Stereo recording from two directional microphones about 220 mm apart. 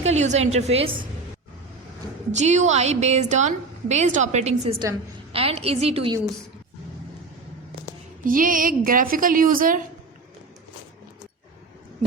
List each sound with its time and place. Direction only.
0.0 s a woman's voice: 30° right (ahead or behind)
2.3 s a woman's voice: 30° right (ahead or behind)
8.3 s a woman's voice: 40° right (ahead or behind)